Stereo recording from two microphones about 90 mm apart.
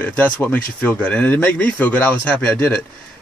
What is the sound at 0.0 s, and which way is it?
A man's voice, 15° left (ahead or behind).